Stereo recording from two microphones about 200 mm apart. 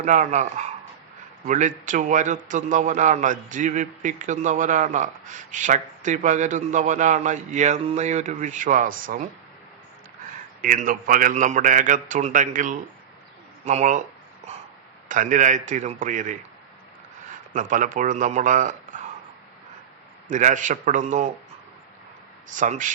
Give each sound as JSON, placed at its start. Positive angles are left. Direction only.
{"t": 0.0, "sound": "a man's voice", "side_deg": -40}
{"t": 10.6, "sound": "a man's voice", "side_deg": -45}
{"t": 15.1, "sound": "a man's voice", "side_deg": -40}
{"t": 17.5, "sound": "a man's voice", "side_deg": -40}
{"t": 20.3, "sound": "a man's voice", "side_deg": -40}
{"t": 22.4, "sound": "a man's voice", "side_deg": -40}